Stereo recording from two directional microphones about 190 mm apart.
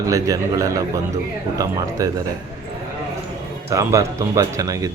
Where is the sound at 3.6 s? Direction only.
15° right (ahead or behind).